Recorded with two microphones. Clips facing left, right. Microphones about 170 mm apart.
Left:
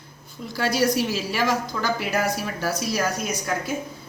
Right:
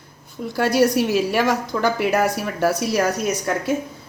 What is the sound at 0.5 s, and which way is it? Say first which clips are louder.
A woman's voice: right 5 dB; 60° right (ahead or behind).